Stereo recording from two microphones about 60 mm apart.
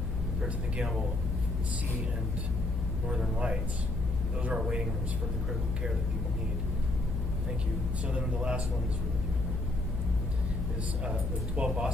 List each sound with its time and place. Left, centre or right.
0.4 s speech: centre
3.1 s speech: centre
8.1 s speech: centre
11.1 s speech: centre